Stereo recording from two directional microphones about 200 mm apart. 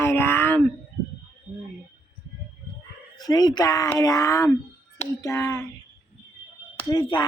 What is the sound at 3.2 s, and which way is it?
Speech, 20° left (ahead or behind).